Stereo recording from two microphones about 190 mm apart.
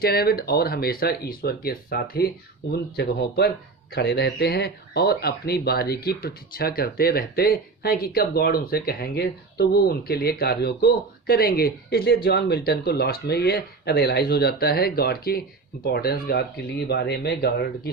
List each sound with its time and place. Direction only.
0.0 s speech: 55° left (ahead or behind)